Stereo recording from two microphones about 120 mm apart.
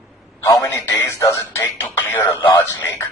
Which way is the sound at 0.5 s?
25° left (ahead or behind).